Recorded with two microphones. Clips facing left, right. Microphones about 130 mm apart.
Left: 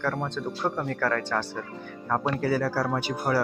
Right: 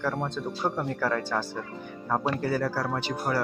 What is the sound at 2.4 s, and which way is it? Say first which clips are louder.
Speech: left 2 dB; 5° left (ahead or behind).